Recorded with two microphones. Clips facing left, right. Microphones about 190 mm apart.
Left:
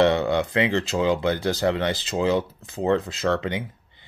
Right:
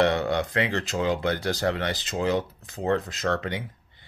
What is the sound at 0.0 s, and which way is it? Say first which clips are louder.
Speech: left 3 dB; 25° left (ahead or behind).